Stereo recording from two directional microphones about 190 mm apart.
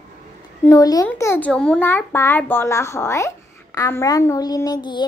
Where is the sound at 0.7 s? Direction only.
20° left (ahead or behind).